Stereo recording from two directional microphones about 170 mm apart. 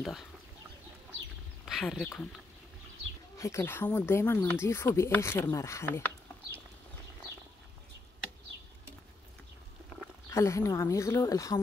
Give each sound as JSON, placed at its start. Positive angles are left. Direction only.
{"t": 1.7, "sound": "speech", "side_deg": 0}
{"t": 3.3, "sound": "speech", "side_deg": 15}
{"t": 10.3, "sound": "speech", "side_deg": 15}